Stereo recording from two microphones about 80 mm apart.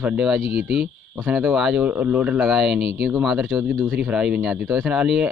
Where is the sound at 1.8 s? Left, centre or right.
Centre.